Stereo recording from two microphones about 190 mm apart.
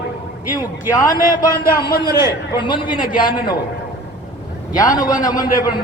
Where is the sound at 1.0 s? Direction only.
45° left (ahead or behind).